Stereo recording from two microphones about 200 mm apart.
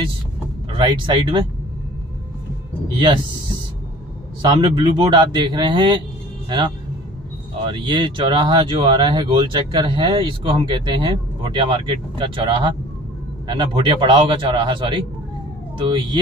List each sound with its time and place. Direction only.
0.7 s speech: 25° right (ahead or behind)
4.4 s speech: 20° right (ahead or behind)
7.6 s speech: 25° right (ahead or behind)